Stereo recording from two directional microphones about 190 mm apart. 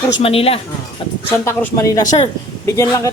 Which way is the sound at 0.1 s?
30° left (ahead or behind).